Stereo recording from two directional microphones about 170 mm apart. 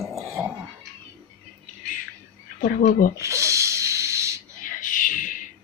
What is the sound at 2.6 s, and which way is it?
Speech, 55° left (ahead or behind).